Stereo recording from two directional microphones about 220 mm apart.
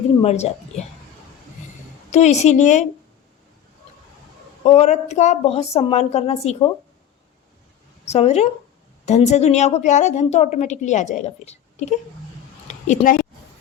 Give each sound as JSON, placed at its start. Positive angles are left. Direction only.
{"t": 0.2, "sound": "a woman's voice", "side_deg": 30}
{"t": 2.0, "sound": "a woman's voice", "side_deg": 30}
{"t": 4.6, "sound": "a woman's voice", "side_deg": 30}
{"t": 8.0, "sound": "a woman's voice", "side_deg": 30}